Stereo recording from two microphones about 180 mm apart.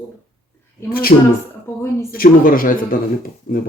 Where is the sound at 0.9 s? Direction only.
55° left (ahead or behind).